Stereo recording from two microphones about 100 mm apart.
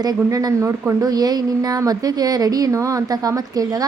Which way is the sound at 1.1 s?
40° right (ahead or behind).